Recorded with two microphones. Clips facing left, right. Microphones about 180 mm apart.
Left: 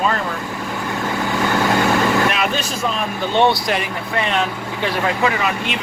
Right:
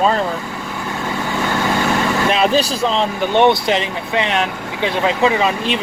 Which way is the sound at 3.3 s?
20° right (ahead or behind).